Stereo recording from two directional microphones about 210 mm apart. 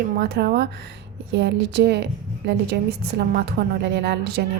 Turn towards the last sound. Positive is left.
turn(degrees=-50)  # may be behind; listen again after turning